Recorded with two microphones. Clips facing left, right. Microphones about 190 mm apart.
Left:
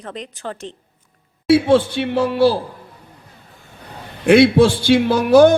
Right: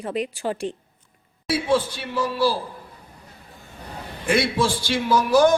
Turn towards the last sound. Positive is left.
turn(degrees=60)  # may be behind; listen again after turning